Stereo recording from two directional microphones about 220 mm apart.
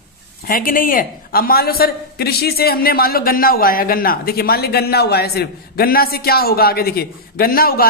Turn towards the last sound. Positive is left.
turn(degrees=40)  # may be behind; listen again after turning